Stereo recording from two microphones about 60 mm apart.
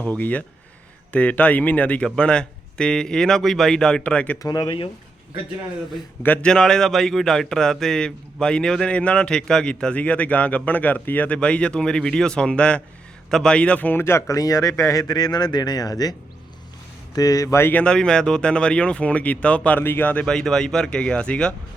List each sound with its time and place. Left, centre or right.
0.0 s speech: left
6.4 s speech: centre; by 11.3 s left
11.3 s speech: centre
14.0 s speech: left
14.3 s speech: left
17.2 s speech: left
17.8 s speech: centre
19.8 s speech: left
20.2 s speech: centre